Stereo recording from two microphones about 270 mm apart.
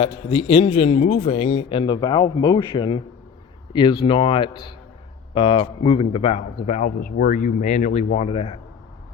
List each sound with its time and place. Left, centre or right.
0.0 s a man's voice: centre